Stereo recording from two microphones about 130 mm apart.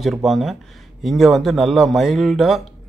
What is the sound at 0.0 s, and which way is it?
Speech, centre (ahead or behind).